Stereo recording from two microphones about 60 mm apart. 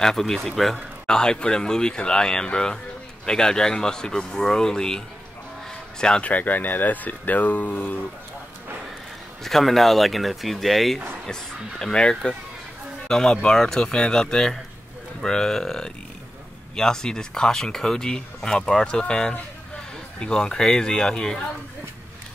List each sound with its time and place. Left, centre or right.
0.0 s speech: centre
5.7 s a sound: centre
6.2 s speech: left
9.4 s speech: centre